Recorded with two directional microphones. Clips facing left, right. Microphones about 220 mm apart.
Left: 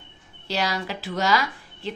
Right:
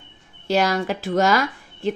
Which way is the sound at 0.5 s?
50° right (ahead or behind).